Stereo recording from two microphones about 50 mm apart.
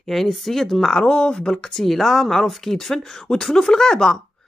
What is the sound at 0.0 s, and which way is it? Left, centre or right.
Speech, centre.